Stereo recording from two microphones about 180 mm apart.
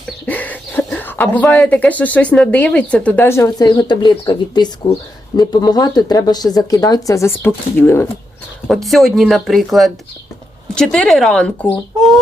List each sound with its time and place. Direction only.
0.3 s speech: 10° left (ahead or behind)
8.6 s speech: centre (ahead or behind)